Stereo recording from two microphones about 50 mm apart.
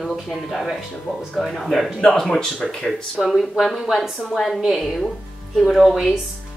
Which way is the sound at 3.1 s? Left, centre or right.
Centre.